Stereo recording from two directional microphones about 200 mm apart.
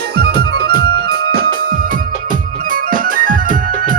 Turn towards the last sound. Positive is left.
turn(degrees=-40)  # may be behind; listen again after turning